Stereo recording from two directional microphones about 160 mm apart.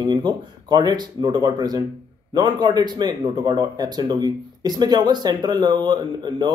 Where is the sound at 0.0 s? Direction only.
25° right (ahead or behind).